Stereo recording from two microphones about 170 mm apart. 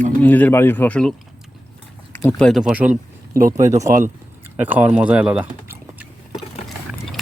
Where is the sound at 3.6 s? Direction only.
15° right (ahead or behind).